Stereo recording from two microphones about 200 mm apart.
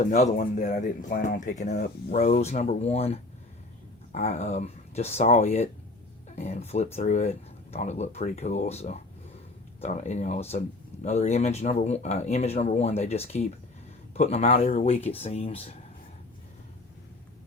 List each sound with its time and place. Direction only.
0.0 s speech: 35° left (ahead or behind)